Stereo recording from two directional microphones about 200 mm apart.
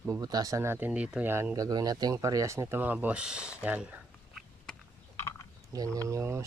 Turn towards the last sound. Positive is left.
turn(degrees=-15)  # may be behind; listen again after turning